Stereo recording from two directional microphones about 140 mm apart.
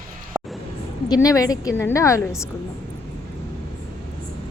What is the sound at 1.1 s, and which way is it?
A woman's voice, 25° left (ahead or behind).